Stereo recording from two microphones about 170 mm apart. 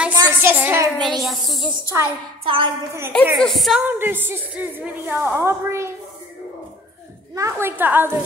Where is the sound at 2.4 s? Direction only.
30° right (ahead or behind).